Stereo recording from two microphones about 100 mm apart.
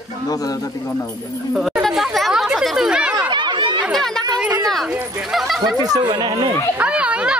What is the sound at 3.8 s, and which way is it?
Chatter, centre (ahead or behind).